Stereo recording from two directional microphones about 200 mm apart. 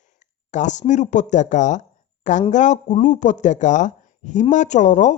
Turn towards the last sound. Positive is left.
turn(degrees=35)  # may be behind; listen again after turning